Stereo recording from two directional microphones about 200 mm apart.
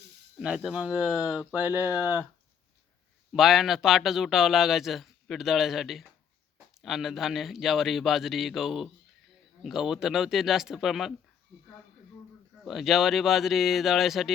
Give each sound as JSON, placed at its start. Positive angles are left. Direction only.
{"t": 0.3, "sound": "a man's voice", "side_deg": -5}
{"t": 1.8, "sound": "speech", "side_deg": 15}
{"t": 3.3, "sound": "a man's voice", "side_deg": 0}
{"t": 12.6, "sound": "a man's voice", "side_deg": 0}